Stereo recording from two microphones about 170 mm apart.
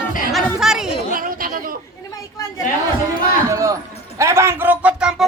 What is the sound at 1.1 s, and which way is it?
Chatter, 55° right (ahead or behind).